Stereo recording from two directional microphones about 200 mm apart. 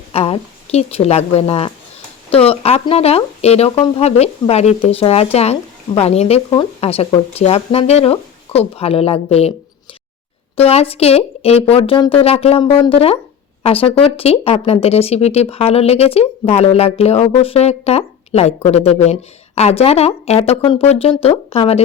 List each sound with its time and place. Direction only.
0.1 s speech: 30° left (ahead or behind)
10.6 s speech: 30° left (ahead or behind)